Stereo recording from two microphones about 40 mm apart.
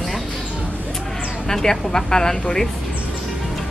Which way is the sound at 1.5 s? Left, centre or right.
Centre.